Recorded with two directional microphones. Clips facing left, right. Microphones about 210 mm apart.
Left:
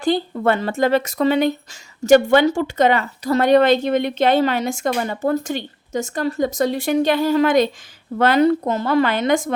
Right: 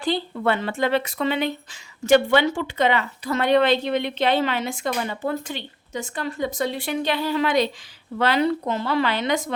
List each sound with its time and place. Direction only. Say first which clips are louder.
0.0 s speech: left 5 dB; 45° left (ahead or behind)